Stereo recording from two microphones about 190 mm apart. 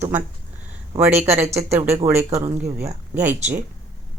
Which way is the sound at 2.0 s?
15° right (ahead or behind).